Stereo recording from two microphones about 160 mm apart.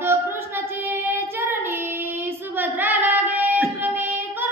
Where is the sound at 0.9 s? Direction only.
15° right (ahead or behind).